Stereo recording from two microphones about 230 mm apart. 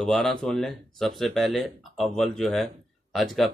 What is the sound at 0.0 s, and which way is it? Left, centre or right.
Speech, centre.